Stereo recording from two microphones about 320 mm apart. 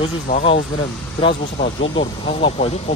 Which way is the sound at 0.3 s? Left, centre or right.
Centre.